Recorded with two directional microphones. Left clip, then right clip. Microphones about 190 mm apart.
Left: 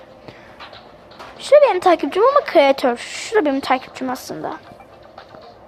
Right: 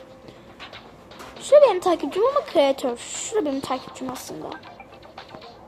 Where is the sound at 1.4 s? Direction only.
10° left (ahead or behind).